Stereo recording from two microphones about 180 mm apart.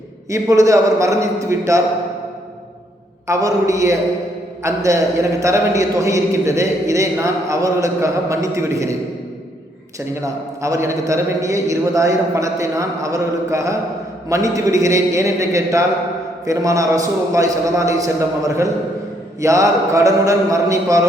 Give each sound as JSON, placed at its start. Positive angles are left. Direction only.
{"t": 0.3, "sound": "a man's voice", "side_deg": -15}
{"t": 3.2, "sound": "a man's voice", "side_deg": -20}
{"t": 10.2, "sound": "a man's voice", "side_deg": -15}